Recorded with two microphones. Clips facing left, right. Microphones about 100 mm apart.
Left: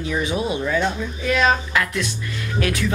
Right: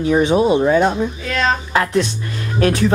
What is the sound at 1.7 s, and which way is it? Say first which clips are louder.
Speech: right 6 dB; 30° right (ahead or behind).